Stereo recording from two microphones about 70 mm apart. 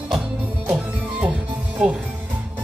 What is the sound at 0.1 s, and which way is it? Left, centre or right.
Music, centre.